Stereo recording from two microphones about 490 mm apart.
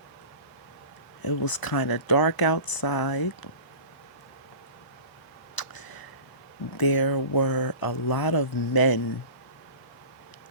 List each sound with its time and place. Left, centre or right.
1.2 s speech: left
5.5 s a sound: left
6.7 s speech: left